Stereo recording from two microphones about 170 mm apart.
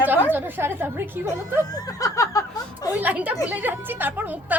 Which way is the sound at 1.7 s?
20° left (ahead or behind).